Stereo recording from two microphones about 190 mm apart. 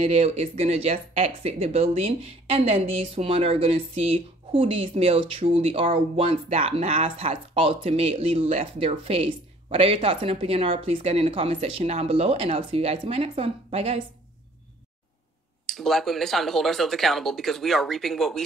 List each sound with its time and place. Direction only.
0.0 s speech: 35° right (ahead or behind)
15.6 s speech: centre (ahead or behind)